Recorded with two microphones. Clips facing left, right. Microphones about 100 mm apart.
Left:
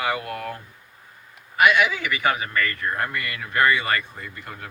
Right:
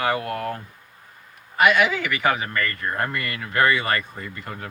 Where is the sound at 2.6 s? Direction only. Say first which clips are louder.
Even; 35° right (ahead or behind).